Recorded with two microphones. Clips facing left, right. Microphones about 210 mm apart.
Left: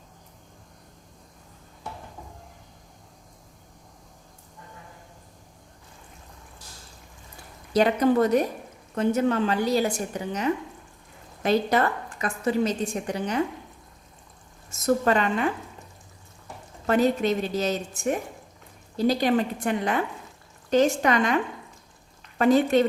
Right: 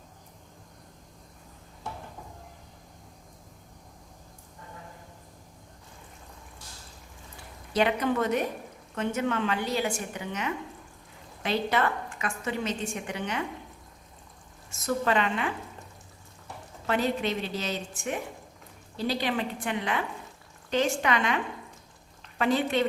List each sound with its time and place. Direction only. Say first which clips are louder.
7.7 s a woman's voice: left 5 dB; 40° left (ahead or behind)
14.7 s a woman's voice: left 5 dB; 40° left (ahead or behind)
16.8 s a woman's voice: left 6 dB; 45° left (ahead or behind)